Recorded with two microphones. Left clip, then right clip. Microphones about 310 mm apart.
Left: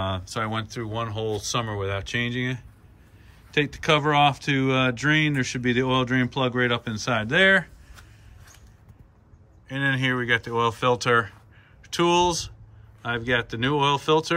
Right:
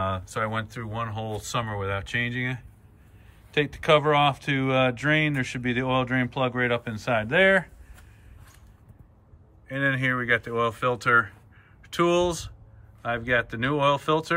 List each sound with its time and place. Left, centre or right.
0.0 s speech: centre
9.7 s speech: centre